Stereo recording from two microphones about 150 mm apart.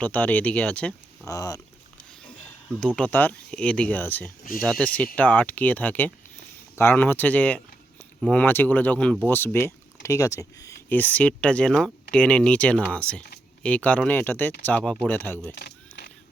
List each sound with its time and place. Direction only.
0.0 s speech: 10° left (ahead or behind)
1.2 s speech: 25° left (ahead or behind)
2.8 s speech: 5° left (ahead or behind)
10.8 s speech: 10° left (ahead or behind)
15.5 s single-lens reflex camera: 90° left